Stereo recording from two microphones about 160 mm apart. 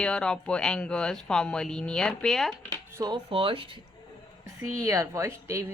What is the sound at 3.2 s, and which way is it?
Speech, 35° right (ahead or behind).